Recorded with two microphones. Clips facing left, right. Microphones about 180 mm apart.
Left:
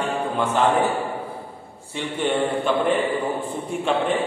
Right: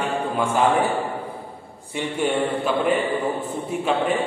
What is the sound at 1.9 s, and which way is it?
A man's voice, 10° right (ahead or behind).